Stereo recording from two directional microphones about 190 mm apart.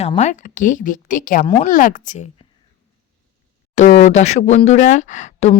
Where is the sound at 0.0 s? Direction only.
35° left (ahead or behind).